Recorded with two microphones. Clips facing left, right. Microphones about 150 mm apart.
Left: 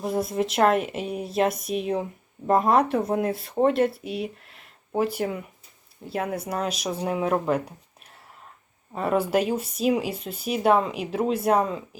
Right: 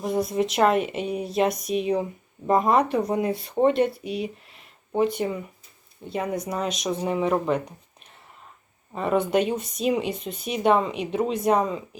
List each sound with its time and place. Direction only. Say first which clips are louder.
0.0 s speech: right 1 dB; centre (ahead or behind)
8.9 s speech: even; 5° left (ahead or behind)